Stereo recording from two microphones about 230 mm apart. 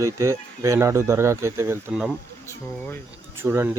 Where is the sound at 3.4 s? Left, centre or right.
Centre.